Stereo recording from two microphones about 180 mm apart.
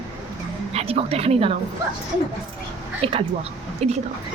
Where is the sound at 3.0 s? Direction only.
30° right (ahead or behind).